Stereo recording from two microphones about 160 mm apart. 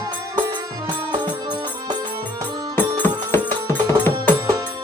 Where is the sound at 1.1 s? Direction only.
25° right (ahead or behind).